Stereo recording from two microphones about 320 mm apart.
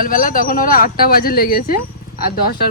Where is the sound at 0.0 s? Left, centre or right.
Left.